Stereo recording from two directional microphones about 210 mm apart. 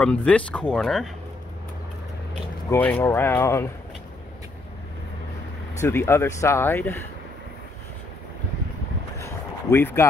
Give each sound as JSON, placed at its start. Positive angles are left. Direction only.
{"t": 0.0, "sound": "speech", "side_deg": 5}
{"t": 2.7, "sound": "speech", "side_deg": 10}
{"t": 5.8, "sound": "speech", "side_deg": 10}
{"t": 9.2, "sound": "a sound", "side_deg": 10}